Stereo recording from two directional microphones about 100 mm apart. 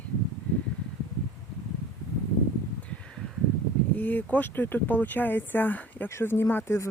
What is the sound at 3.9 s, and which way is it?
Speech, 15° left (ahead or behind).